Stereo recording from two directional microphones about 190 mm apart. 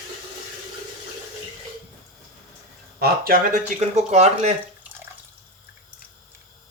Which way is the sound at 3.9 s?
35° right (ahead or behind).